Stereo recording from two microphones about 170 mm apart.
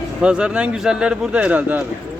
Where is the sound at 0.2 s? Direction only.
5° right (ahead or behind).